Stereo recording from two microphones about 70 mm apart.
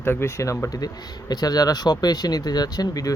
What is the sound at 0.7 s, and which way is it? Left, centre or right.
Speech, left.